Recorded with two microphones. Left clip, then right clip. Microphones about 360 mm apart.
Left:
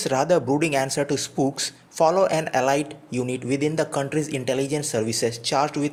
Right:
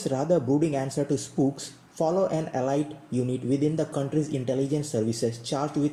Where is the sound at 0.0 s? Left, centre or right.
Left.